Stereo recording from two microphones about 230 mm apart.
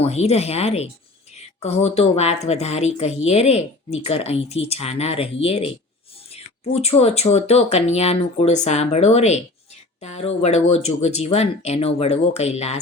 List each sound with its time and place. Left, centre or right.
0.0 s speech: left